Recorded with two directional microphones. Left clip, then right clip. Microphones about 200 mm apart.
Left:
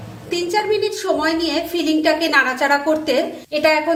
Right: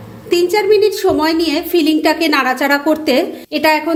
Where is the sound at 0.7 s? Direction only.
35° right (ahead or behind).